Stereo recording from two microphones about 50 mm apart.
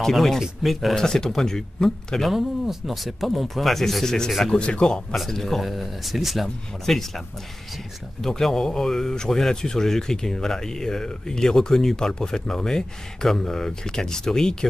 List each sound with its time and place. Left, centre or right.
0.0 s a man's voice: centre
2.2 s speech: centre
4.5 s a man's voice: centre
5.1 s speech: centre
8.2 s a man's voice: centre